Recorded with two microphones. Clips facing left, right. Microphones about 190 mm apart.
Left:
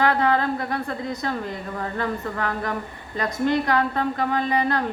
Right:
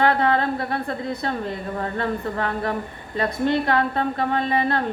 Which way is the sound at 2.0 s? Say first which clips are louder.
Right 1 dB; 30° right (ahead or behind).